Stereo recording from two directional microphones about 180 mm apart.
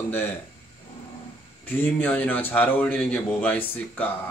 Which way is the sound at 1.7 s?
10° left (ahead or behind).